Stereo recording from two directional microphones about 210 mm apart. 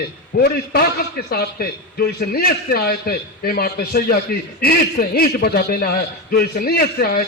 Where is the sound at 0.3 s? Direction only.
45° left (ahead or behind).